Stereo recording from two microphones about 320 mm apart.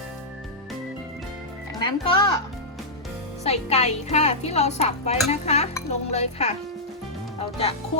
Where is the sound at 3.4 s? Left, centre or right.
Centre.